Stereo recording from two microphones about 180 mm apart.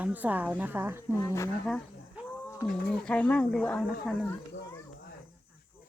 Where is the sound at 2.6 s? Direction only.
60° left (ahead or behind).